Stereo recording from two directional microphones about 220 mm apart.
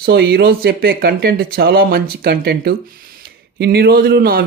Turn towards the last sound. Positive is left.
turn(degrees=-45)  # may be behind; listen again after turning